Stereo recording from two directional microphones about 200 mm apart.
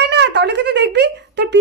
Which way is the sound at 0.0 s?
60° right (ahead or behind).